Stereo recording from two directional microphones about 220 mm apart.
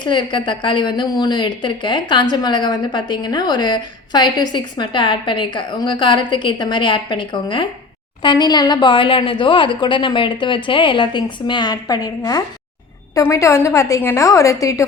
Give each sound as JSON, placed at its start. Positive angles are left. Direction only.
{"t": 0.0, "sound": "a woman's voice", "side_deg": 20}